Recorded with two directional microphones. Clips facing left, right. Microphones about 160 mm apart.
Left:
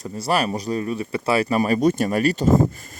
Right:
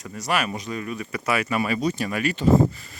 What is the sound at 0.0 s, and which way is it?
Speech, 30° left (ahead or behind).